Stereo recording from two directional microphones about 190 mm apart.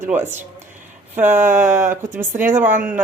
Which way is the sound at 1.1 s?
10° right (ahead or behind).